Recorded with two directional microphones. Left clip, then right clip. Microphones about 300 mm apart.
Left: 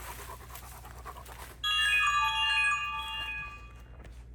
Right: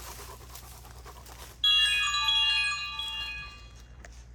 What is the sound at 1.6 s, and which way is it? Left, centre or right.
Wind chime, centre.